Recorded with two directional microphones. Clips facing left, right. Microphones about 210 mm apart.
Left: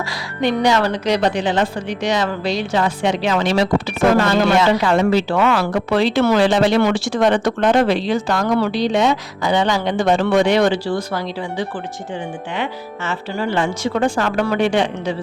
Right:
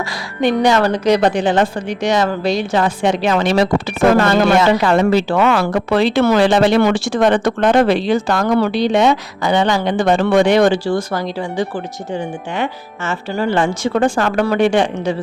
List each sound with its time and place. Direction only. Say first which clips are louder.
0.4 s a woman's voice: right 3 dB; 50° right (ahead or behind)